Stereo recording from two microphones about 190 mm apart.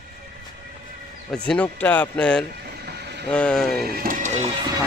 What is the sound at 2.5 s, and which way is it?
Vehicle, 55° right (ahead or behind).